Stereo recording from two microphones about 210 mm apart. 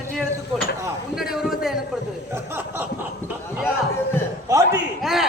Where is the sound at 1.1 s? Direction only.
Centre (ahead or behind).